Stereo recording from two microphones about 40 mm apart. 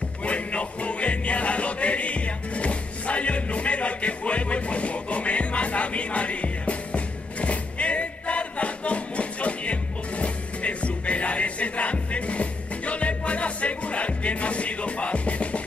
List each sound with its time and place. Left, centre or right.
0.2 s music: left